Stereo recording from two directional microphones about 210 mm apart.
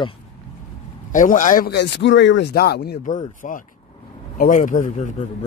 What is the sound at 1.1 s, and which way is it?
Speech, 40° left (ahead or behind).